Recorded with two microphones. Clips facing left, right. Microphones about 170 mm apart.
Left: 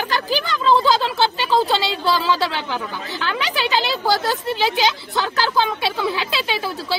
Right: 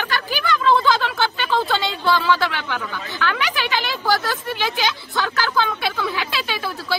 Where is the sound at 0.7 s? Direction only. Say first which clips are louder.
Left 2 dB; 30° left (ahead or behind).